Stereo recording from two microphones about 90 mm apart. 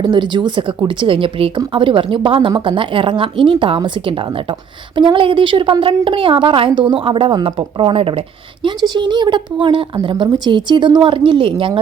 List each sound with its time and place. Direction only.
0.0 s speech: 60° right (ahead or behind); by 8.2 s 90° right
8.6 s a woman's voice: 55° right (ahead or behind)
10.2 s a woman's voice: 50° right (ahead or behind); by 11.5 s 70° right (ahead or behind)